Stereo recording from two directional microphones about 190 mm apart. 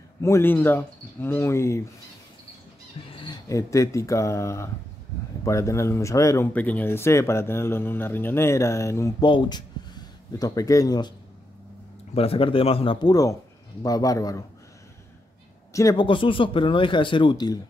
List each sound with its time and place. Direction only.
0.2 s speech: 15° left (ahead or behind)
3.1 s speech: 25° left (ahead or behind)
15.7 s speech: 20° left (ahead or behind)